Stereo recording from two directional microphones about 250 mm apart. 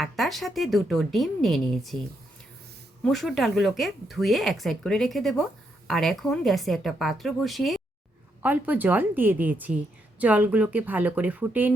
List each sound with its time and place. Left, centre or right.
0.0 s speech: centre
3.0 s speech: centre